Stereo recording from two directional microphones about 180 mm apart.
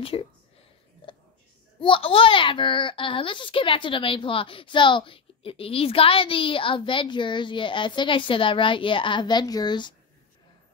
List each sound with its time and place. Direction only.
0.0 s speech: 30° left (ahead or behind)
1.8 s a child's voice: 30° left (ahead or behind)